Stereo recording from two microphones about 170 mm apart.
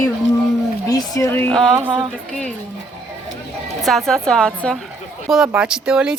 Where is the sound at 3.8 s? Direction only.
Centre (ahead or behind).